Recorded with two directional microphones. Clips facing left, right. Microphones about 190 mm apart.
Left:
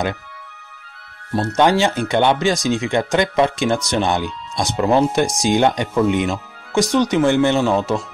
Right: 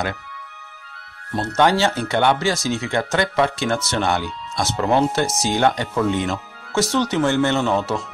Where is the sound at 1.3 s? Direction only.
10° left (ahead or behind).